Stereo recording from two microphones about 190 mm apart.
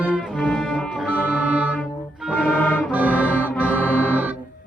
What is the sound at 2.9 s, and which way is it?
Music, 10° right (ahead or behind).